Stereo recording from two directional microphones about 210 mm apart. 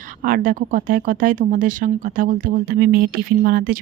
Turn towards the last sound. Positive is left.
turn(degrees=-45)  # may be behind; listen again after turning